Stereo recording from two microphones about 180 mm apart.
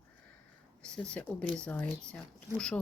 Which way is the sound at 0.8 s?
5° left (ahead or behind).